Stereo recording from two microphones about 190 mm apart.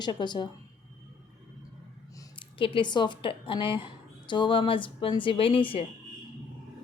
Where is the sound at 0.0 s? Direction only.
25° left (ahead or behind).